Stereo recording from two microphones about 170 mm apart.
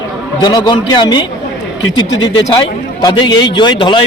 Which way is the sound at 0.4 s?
25° left (ahead or behind).